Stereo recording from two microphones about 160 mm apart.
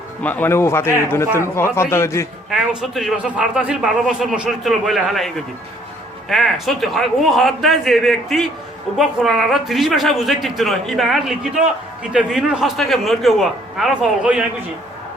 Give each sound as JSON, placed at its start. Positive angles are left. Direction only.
{"t": 0.2, "sound": "a man's voice", "side_deg": 10}
{"t": 2.5, "sound": "a man's voice", "side_deg": 0}